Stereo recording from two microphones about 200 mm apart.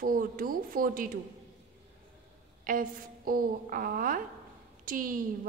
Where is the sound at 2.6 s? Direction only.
45° right (ahead or behind).